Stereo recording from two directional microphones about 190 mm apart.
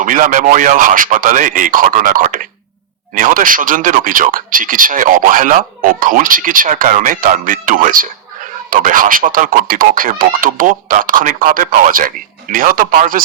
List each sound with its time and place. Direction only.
0.0 s speech: 45° right (ahead or behind)